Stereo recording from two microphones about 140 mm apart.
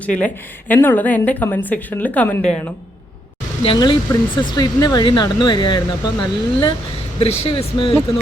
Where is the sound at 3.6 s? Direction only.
35° left (ahead or behind).